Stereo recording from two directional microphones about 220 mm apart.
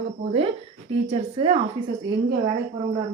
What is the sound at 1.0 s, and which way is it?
Speech, 25° right (ahead or behind).